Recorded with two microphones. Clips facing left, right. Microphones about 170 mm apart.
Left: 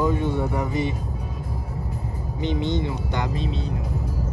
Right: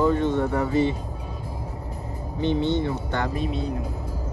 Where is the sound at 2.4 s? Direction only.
15° left (ahead or behind).